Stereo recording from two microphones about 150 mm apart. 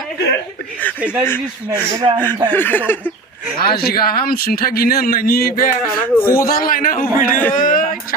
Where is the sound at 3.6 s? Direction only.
90° left; by 5.7 s 75° left (ahead or behind).